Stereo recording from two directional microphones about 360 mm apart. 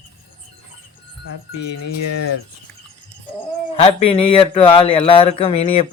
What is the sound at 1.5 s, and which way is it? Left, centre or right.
Music, left.